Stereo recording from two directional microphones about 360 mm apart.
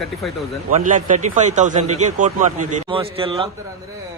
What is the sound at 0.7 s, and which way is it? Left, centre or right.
A man's voice, right.